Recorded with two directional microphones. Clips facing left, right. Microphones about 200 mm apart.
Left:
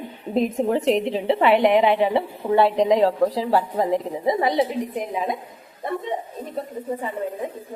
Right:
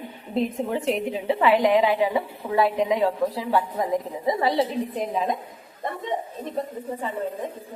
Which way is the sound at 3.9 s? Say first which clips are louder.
Even; 20° left (ahead or behind).